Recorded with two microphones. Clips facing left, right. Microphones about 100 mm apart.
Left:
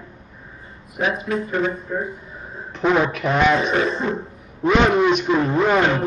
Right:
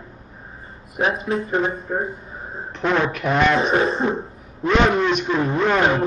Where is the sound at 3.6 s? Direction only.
35° right (ahead or behind).